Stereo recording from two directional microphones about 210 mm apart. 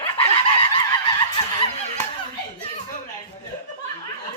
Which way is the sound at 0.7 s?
25° left (ahead or behind).